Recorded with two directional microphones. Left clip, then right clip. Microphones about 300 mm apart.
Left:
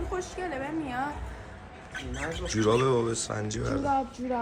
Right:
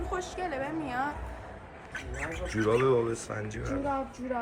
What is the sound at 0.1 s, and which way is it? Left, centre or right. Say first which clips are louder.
Speech: right 2 dB; centre.